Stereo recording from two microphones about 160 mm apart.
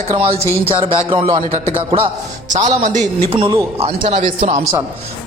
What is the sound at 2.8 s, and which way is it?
Speech, 45° right (ahead or behind).